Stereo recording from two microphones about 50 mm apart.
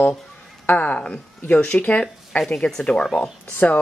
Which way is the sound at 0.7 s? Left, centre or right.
Left.